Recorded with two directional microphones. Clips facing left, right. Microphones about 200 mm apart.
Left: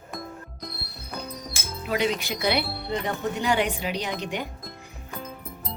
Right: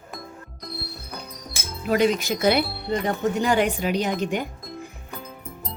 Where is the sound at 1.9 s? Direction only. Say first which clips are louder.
Right 6 dB; 45° right (ahead or behind).